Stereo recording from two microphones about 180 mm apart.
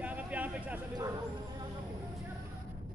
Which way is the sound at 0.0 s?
10° right (ahead or behind).